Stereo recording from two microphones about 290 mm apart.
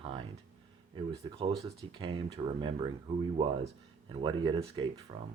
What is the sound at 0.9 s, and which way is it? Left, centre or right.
Speech, centre.